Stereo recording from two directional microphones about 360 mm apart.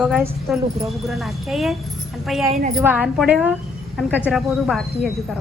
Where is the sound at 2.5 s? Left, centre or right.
Centre.